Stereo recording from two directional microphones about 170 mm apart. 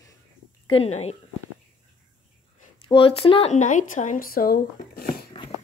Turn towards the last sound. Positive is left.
turn(degrees=60)  # may be behind; listen again after turning